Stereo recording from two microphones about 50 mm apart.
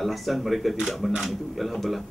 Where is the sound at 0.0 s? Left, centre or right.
Centre.